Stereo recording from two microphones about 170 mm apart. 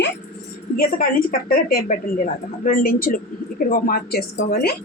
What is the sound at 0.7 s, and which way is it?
A woman's voice, 60° left (ahead or behind).